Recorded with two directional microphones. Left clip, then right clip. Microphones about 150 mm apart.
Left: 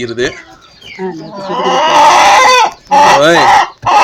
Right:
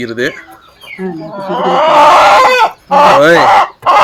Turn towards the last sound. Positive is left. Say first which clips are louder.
# even
turn(degrees=20)  # may be behind; listen again after turning